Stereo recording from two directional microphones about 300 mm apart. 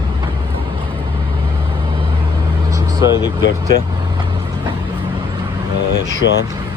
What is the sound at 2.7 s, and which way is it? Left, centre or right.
Vehicle, centre.